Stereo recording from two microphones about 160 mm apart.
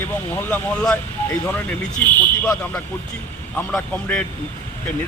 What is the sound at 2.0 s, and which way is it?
Speech, 10° left (ahead or behind).